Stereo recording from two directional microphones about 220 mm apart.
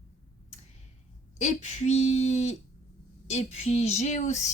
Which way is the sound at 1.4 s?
30° left (ahead or behind).